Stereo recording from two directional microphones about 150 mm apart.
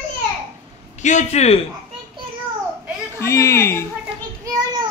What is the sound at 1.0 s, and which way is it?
Speech, 50° left (ahead or behind).